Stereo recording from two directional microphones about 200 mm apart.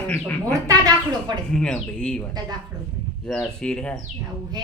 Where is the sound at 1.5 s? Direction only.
5° left (ahead or behind).